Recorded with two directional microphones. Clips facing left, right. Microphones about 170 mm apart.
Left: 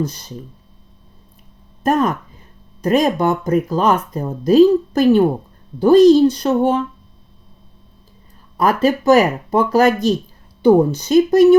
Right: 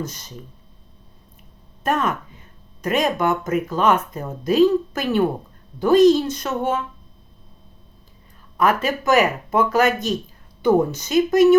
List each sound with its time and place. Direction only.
0.0 s speech: 35° left (ahead or behind)
1.8 s speech: 35° left (ahead or behind)
8.5 s speech: 35° left (ahead or behind)